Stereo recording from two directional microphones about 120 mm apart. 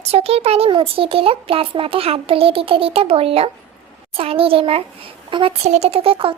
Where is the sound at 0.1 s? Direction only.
55° right (ahead or behind).